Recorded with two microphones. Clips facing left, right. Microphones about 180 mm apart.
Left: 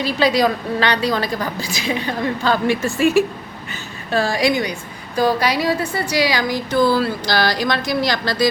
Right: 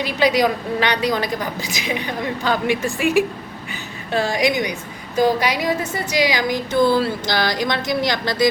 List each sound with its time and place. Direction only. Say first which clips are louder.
0.0 s a woman's voice: left 1 dB; 15° right (ahead or behind)